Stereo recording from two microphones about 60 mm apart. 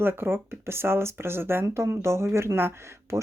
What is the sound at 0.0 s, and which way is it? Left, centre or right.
Speech, right.